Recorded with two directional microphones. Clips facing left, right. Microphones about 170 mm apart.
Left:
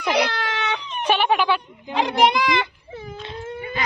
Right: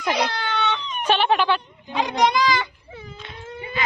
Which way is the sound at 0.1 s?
80° left.